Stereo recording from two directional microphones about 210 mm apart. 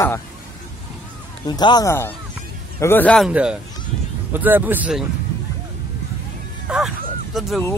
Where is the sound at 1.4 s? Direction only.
20° left (ahead or behind); by 5.1 s 5° right (ahead or behind).